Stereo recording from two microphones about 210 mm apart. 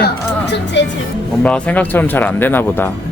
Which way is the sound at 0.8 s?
55° left (ahead or behind).